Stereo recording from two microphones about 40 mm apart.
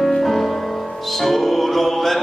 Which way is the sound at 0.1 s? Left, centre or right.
Centre.